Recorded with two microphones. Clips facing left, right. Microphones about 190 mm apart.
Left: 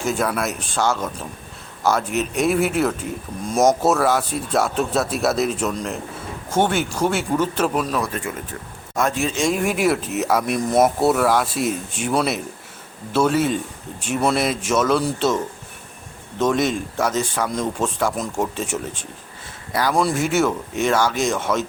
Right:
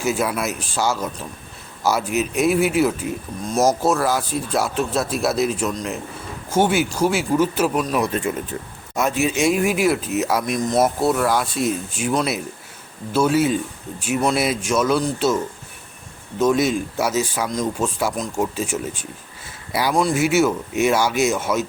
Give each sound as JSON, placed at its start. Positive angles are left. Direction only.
{"t": 0.0, "sound": "speech", "side_deg": -5}
{"t": 7.9, "sound": "speech", "side_deg": -20}
{"t": 9.0, "sound": "speech", "side_deg": -5}
{"t": 16.4, "sound": "speech", "side_deg": 0}